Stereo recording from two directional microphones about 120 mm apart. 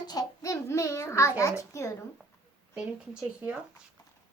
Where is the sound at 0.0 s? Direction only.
35° left (ahead or behind).